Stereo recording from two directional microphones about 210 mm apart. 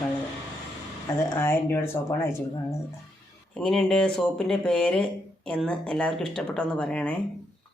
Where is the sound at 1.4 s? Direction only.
10° left (ahead or behind).